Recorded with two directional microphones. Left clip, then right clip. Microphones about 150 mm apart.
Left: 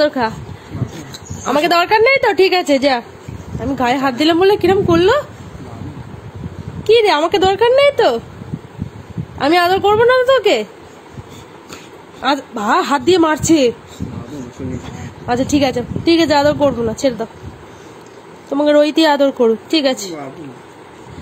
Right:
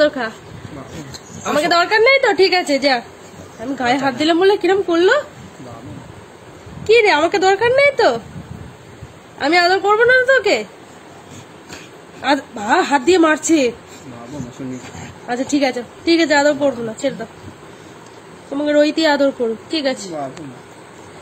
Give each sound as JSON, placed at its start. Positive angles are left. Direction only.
{"t": 0.0, "sound": "speech", "side_deg": 40}
{"t": 1.4, "sound": "a woman's voice", "side_deg": 40}
{"t": 6.8, "sound": "a woman's voice", "side_deg": 35}
{"t": 9.4, "sound": "a woman's voice", "side_deg": 35}
{"t": 12.2, "sound": "a woman's voice", "side_deg": 40}
{"t": 14.8, "sound": "a woman's voice", "side_deg": 40}
{"t": 18.5, "sound": "a woman's voice", "side_deg": 45}